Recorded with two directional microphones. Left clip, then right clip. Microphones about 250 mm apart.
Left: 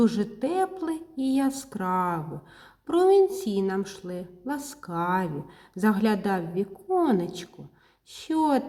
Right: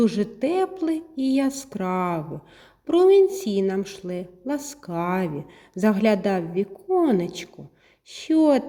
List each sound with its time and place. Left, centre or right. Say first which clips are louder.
0.0 s speech: right 3 dB; centre